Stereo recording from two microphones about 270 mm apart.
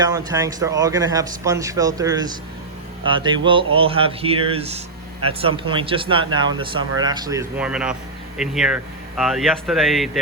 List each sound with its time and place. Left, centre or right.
0.0 s speech: centre